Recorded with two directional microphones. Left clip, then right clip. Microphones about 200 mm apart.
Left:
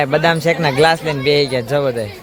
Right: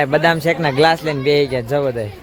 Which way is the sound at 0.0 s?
5° right (ahead or behind).